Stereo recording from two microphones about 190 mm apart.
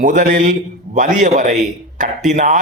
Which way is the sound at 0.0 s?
45° right (ahead or behind).